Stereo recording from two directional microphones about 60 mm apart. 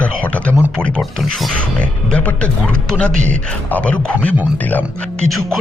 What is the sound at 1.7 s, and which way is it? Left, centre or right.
Speech, left.